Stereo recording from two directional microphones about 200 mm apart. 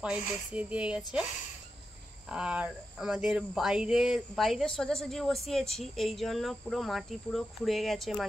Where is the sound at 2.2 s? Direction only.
5° right (ahead or behind).